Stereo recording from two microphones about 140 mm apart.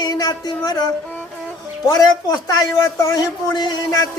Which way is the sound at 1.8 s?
25° left (ahead or behind).